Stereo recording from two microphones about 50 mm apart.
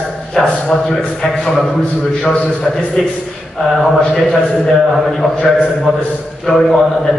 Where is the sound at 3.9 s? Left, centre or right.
Centre.